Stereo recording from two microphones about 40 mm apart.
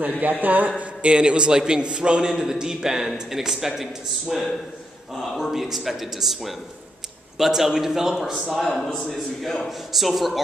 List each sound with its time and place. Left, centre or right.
0.2 s a man's voice: right
1.0 s a man's voice: right; by 10.4 s centre